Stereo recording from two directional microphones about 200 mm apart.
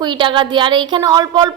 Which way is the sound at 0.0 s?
25° right (ahead or behind).